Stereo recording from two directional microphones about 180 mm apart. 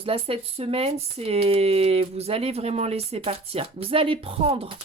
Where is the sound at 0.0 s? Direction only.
30° right (ahead or behind).